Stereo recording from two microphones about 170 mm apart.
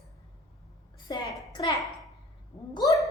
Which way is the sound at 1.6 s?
25° left (ahead or behind).